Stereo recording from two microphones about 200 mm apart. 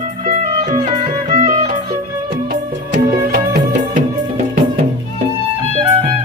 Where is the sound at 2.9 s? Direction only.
45° right (ahead or behind).